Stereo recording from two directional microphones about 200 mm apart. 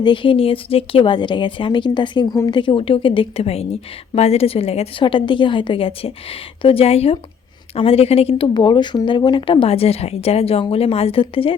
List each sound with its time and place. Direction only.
0.0 s a woman's voice: 25° left (ahead or behind)